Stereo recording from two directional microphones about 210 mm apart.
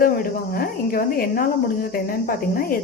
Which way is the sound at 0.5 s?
45° left (ahead or behind).